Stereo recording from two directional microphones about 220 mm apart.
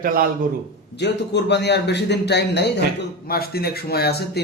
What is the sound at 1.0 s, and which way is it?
A man's voice, 50° left (ahead or behind).